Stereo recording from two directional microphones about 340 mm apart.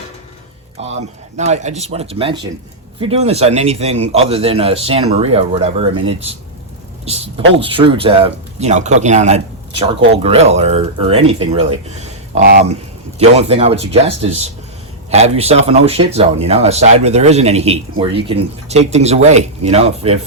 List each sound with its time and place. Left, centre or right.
0.8 s speech: centre